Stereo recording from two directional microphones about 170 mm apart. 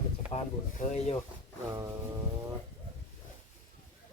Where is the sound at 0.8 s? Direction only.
40° left (ahead or behind).